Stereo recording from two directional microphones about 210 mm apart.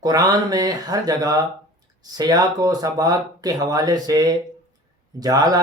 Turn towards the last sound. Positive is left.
turn(degrees=-15)  # may be behind; listen again after turning